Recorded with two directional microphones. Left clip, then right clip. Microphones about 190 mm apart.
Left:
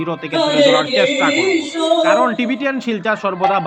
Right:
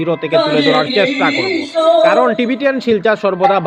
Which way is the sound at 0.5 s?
20° right (ahead or behind).